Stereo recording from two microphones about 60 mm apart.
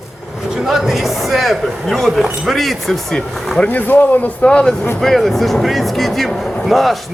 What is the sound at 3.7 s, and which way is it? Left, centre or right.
Speech, left.